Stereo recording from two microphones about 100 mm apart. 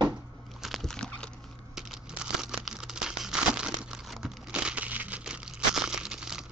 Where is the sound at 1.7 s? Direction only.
5° right (ahead or behind).